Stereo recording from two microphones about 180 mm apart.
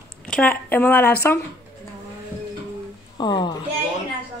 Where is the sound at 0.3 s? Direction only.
10° left (ahead or behind).